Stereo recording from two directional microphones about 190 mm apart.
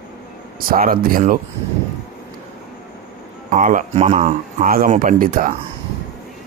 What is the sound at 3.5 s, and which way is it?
Speech, 45° right (ahead or behind).